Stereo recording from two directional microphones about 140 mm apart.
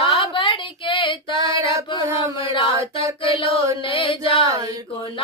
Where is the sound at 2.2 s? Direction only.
35° left (ahead or behind).